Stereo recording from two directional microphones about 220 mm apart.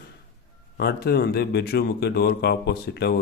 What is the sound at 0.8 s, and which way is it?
Speech, 45° left (ahead or behind).